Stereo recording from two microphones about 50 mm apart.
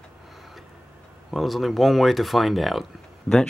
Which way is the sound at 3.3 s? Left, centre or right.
Centre.